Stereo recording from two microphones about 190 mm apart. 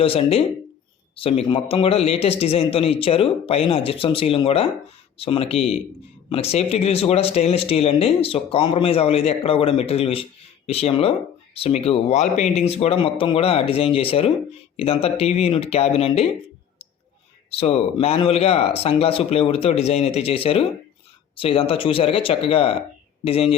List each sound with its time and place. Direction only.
0.0 s a man's voice: 30° left (ahead or behind)
17.5 s a man's voice: 30° left (ahead or behind)